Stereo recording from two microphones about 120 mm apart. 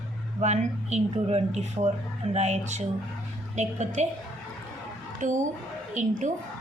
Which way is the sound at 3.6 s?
80° right.